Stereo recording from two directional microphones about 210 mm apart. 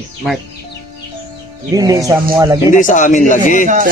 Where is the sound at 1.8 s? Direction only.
15° right (ahead or behind).